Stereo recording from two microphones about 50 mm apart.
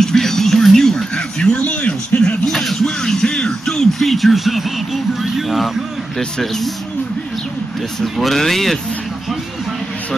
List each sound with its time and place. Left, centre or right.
0.0 s music: centre
1.6 s speech: left
2.4 s music: centre
4.0 s speech: centre
8.0 s speech: centre